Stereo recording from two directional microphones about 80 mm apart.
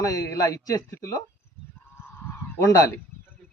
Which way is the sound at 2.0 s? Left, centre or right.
Left.